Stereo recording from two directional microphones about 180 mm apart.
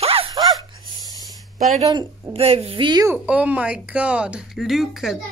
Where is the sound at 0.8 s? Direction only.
20° right (ahead or behind).